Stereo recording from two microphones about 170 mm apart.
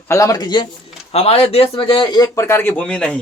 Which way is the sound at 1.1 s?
35° left (ahead or behind).